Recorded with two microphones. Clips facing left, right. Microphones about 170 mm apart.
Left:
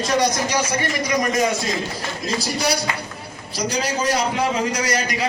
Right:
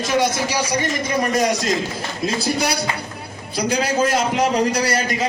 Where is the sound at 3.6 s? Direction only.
55° right (ahead or behind).